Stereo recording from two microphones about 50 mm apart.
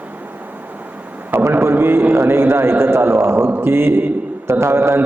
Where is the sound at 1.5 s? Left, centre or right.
Right.